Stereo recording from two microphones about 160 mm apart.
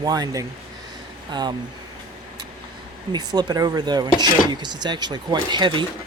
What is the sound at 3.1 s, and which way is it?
Speech, 25° right (ahead or behind).